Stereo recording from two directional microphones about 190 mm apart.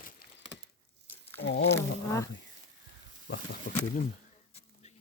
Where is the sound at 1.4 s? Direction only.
65° left (ahead or behind).